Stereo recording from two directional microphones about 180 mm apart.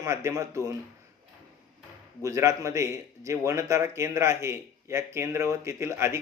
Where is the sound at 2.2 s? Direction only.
15° right (ahead or behind).